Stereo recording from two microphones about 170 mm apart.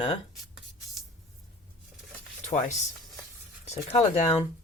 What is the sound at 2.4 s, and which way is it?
Speech, 50° left (ahead or behind).